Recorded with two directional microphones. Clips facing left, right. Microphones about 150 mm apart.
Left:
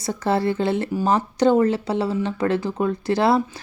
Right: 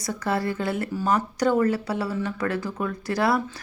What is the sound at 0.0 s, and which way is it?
Speech, 25° left (ahead or behind).